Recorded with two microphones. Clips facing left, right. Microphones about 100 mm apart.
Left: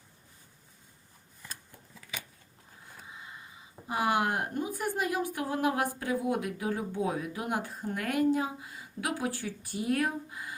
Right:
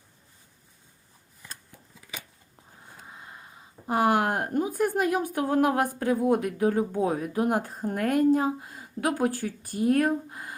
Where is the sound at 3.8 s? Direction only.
50° right (ahead or behind).